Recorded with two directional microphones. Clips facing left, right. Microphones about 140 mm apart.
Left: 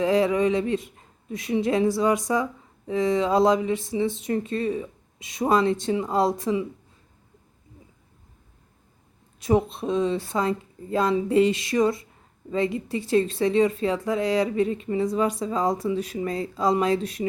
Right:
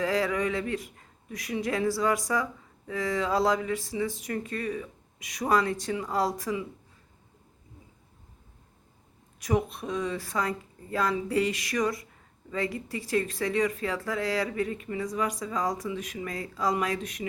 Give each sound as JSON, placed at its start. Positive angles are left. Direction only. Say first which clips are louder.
{"t": 0.0, "sound": "speech", "louder": "left 6 dB", "side_deg": 20}
{"t": 9.4, "sound": "speech", "louder": "left 6 dB", "side_deg": 25}